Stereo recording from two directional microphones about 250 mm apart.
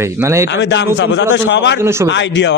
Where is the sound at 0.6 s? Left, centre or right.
Left.